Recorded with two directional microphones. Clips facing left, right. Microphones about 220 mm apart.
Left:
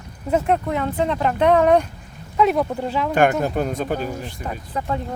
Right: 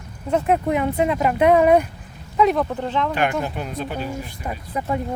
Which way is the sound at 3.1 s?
50° left (ahead or behind).